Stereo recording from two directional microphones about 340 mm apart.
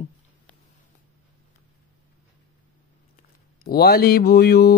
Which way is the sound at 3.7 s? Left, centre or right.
Left.